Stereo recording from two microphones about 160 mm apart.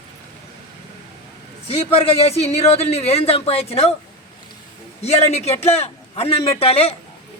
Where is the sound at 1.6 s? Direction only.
35° left (ahead or behind).